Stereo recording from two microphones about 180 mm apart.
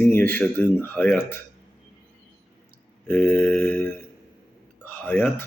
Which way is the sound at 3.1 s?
10° left (ahead or behind).